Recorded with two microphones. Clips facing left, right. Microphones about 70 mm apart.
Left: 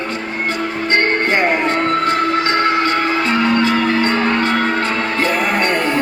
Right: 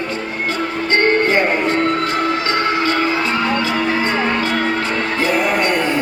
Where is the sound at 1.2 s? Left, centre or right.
Left.